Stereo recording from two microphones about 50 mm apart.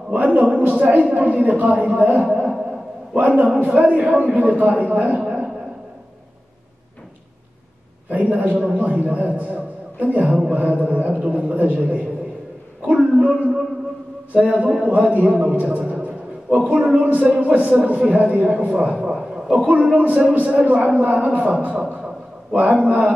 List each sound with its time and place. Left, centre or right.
0.1 s a man's voice: right
8.1 s a man's voice: right
12.8 s a man's voice: centre
19.7 s a man's voice: right